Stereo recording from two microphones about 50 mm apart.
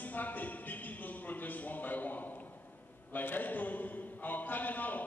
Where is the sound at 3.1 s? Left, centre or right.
Left.